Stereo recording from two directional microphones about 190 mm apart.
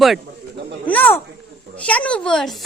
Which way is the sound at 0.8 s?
10° left (ahead or behind).